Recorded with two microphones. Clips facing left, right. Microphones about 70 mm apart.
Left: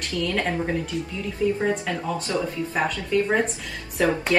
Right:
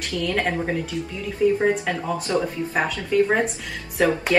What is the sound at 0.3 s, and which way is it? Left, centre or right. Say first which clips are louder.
Speech: right 3 dB; right.